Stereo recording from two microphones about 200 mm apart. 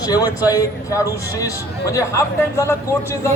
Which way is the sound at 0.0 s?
20° left (ahead or behind).